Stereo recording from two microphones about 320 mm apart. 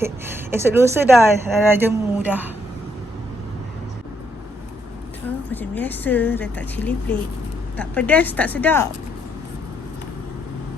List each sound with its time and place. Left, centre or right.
0.5 s a woman's voice: centre
5.5 s speech: centre